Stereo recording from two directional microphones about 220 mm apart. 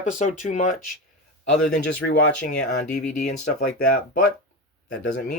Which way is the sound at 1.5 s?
5° left (ahead or behind).